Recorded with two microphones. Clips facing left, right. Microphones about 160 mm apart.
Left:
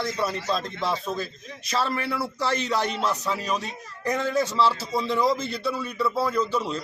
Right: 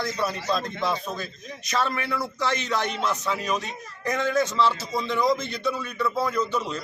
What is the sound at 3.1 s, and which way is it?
Speech, 10° left (ahead or behind).